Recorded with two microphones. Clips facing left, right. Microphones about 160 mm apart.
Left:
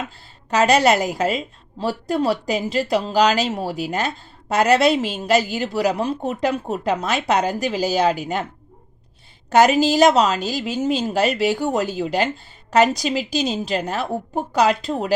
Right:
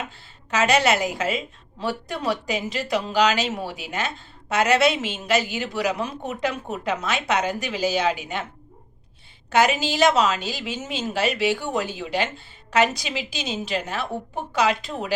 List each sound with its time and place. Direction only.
0.5 s a woman's voice: 40° left (ahead or behind)
9.5 s a woman's voice: 40° left (ahead or behind)